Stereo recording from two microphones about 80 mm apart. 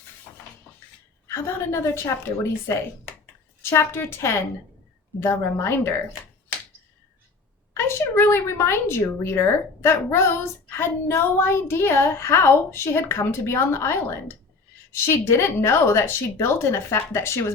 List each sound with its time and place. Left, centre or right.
1.3 s a woman's voice: left
7.7 s a woman's voice: left